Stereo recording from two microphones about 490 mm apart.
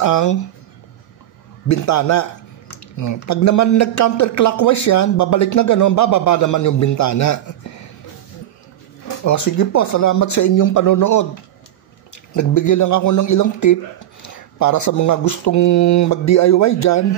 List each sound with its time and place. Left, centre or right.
0.0 s speech: left
1.7 s speech: left
9.2 s speech: left